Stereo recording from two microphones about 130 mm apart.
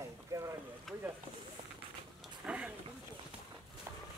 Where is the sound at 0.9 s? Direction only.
Centre (ahead or behind).